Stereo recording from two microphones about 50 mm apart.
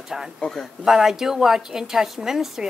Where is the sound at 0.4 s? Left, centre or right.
Centre.